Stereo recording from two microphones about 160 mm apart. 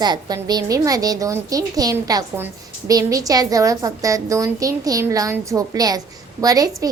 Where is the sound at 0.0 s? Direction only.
25° right (ahead or behind).